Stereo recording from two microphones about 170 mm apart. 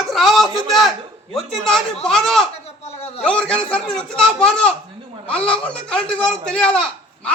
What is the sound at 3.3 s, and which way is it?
A man's voice, 5° left (ahead or behind).